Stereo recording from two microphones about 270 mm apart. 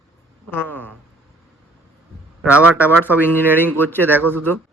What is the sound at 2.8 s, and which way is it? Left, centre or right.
Speech, centre.